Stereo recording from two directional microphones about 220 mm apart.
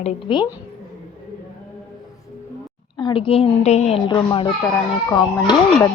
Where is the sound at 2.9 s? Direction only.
20° left (ahead or behind).